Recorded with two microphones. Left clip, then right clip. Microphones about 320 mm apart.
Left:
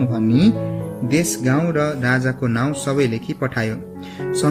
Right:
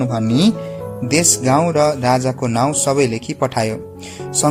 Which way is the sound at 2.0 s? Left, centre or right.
Right.